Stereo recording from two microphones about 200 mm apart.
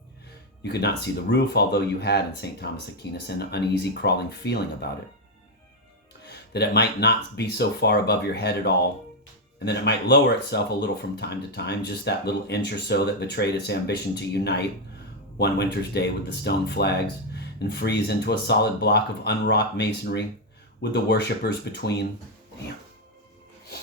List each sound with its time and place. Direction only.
0.6 s speech: 55° left (ahead or behind)
6.2 s speech: 55° left (ahead or behind)